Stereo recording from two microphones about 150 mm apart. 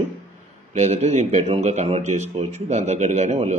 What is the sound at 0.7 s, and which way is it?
Speech, 50° right (ahead or behind).